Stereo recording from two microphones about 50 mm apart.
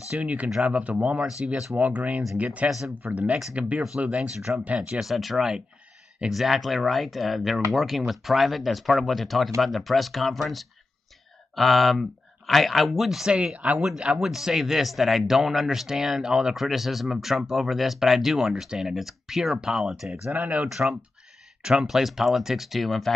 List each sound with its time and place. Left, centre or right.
0.1 s speech: right
4.1 s speech: centre
4.6 s speech: right
5.0 s speech: centre
13.3 s speech: centre